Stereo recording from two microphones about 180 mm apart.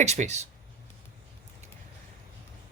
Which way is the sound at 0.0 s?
40° right (ahead or behind).